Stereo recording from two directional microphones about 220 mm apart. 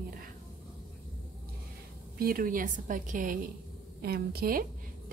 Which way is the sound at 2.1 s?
40° right (ahead or behind).